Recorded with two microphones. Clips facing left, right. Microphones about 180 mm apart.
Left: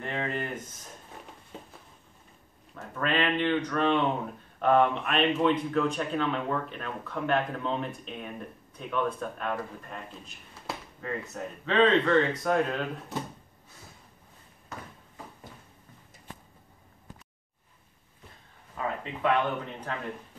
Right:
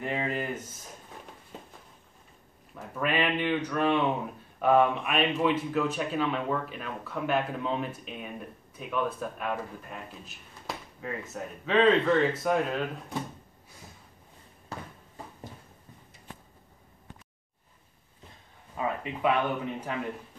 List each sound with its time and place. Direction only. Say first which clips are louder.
0.0 s speech: right 1 dB; 10° right (ahead or behind)
2.7 s speech: even; 10° right (ahead or behind)
14.7 s a sound: right 2 dB; 35° right (ahead or behind)
18.8 s speech: right 1 dB; 10° right (ahead or behind)